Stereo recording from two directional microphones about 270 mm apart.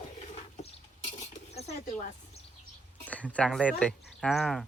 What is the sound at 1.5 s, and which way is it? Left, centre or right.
Speech, left.